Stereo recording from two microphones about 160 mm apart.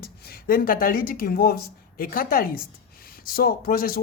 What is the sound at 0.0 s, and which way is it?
Speech, 70° left (ahead or behind).